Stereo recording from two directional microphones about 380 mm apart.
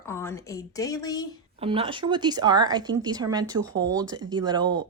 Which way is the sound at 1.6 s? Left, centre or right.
Centre.